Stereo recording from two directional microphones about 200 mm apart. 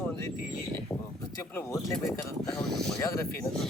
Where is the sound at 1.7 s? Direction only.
Centre (ahead or behind).